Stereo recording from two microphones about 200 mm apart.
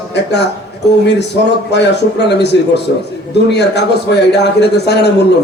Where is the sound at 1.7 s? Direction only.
60° left (ahead or behind).